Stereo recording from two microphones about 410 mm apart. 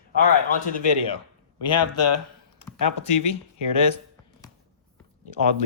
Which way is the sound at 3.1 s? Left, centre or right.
Left.